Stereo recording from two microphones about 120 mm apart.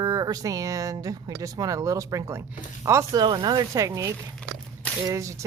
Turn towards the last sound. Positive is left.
turn(degrees=-25)  # may be behind; listen again after turning